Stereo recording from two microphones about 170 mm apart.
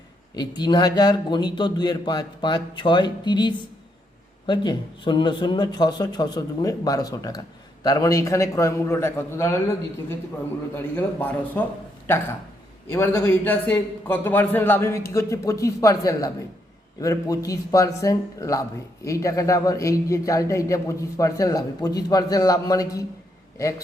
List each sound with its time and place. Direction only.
0.3 s a man's voice: 25° left (ahead or behind)
10.8 s a man's voice: 10° left (ahead or behind)
12.9 s a man's voice: 15° left (ahead or behind)